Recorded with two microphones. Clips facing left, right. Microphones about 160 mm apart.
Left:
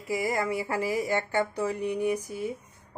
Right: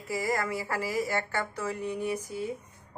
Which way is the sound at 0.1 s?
20° left (ahead or behind).